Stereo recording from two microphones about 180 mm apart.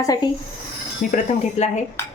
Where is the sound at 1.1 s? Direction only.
40° left (ahead or behind).